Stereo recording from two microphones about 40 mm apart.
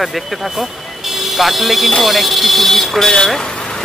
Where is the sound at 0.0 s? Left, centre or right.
Centre.